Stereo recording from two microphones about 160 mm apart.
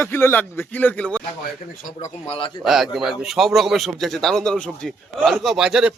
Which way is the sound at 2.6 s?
Centre (ahead or behind).